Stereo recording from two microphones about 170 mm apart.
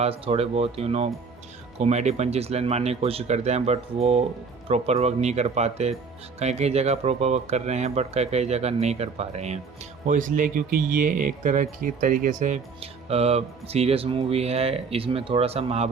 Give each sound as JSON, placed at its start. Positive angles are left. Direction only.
{"t": 0.0, "sound": "speech", "side_deg": -35}
{"t": 10.1, "sound": "speech", "side_deg": -50}